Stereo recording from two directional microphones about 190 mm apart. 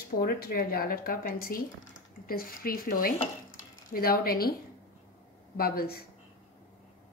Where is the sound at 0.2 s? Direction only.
50° left (ahead or behind).